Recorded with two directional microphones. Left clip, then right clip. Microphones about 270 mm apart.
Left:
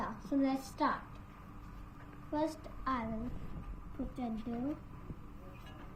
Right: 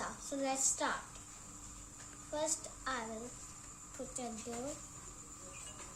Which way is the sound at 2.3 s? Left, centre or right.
Centre.